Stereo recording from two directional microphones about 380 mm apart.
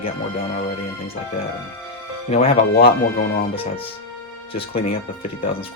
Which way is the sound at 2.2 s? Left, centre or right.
Centre.